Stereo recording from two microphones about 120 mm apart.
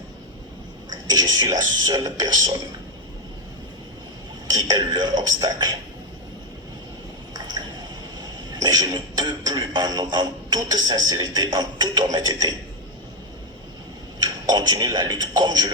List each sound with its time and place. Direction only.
1.1 s music: 35° right (ahead or behind)
4.4 s music: 35° right (ahead or behind)
8.6 s music: 35° right (ahead or behind)
14.2 s a sound: 35° right (ahead or behind)